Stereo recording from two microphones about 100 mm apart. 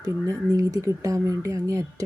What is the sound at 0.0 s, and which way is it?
Speech, 35° right (ahead or behind).